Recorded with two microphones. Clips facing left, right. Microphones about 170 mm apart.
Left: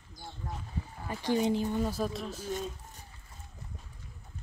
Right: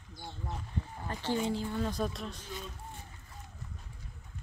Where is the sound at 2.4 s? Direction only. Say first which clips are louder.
Left 7 dB; 45° left (ahead or behind).